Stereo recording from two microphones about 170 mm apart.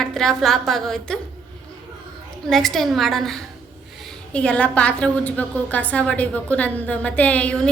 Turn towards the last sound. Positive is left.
turn(degrees=5)  # may be behind; listen again after turning